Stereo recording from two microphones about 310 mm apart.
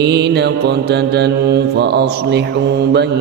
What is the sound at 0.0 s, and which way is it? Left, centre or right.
Mantra, right.